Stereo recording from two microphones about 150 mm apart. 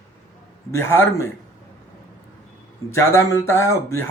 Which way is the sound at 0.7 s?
15° left (ahead or behind).